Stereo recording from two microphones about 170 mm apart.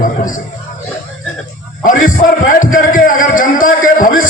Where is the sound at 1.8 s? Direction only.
50° left (ahead or behind).